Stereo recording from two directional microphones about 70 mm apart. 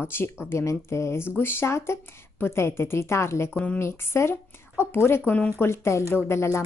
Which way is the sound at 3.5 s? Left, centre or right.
Left.